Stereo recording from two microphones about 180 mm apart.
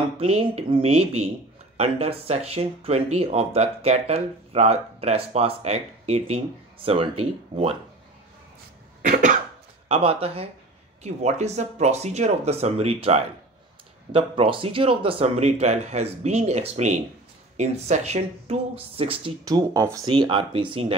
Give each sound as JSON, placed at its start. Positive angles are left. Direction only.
{"t": 0.2, "sound": "speech", "side_deg": -35}
{"t": 9.0, "sound": "cough", "side_deg": -45}
{"t": 9.8, "sound": "speech", "side_deg": -35}
{"t": 19.4, "sound": "speech", "side_deg": -20}